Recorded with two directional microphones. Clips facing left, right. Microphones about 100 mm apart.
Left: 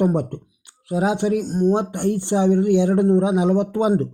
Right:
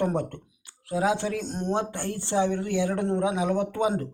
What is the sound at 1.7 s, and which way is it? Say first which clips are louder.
Speech: left 8 dB; 20° left (ahead or behind).